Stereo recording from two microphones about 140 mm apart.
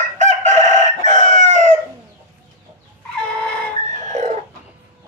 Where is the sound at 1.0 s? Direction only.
60° right (ahead or behind).